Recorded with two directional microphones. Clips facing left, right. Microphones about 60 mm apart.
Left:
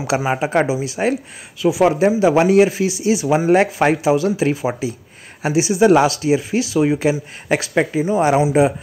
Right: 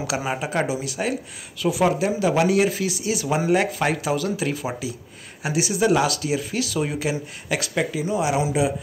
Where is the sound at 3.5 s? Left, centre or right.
Left.